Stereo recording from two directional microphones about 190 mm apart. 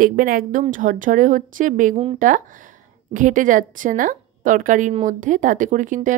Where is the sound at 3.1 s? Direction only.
45° right (ahead or behind).